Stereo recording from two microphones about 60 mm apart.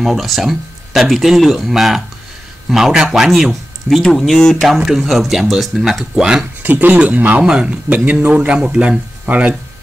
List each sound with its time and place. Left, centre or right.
0.0 s speech: centre
4.0 s speech: centre
4.7 s speech: centre
6.1 s speech: centre
6.6 s speech: right
7.4 s speech: centre